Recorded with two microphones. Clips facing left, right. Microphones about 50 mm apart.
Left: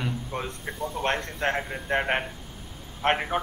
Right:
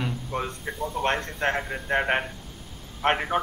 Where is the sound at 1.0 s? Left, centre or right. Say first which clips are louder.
Right 1 dB; centre.